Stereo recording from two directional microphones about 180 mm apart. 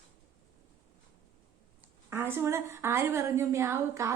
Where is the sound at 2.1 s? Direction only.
15° right (ahead or behind).